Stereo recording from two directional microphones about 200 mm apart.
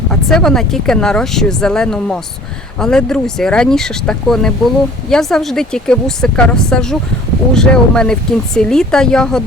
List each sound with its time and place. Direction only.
0.1 s speech: 5° left (ahead or behind)